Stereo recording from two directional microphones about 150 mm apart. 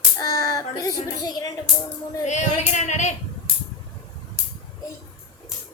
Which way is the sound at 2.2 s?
50° left (ahead or behind).